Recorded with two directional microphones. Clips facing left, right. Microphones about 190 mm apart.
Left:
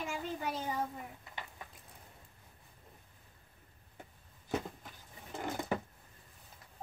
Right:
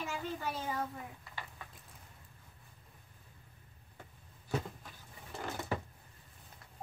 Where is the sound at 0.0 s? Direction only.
15° left (ahead or behind).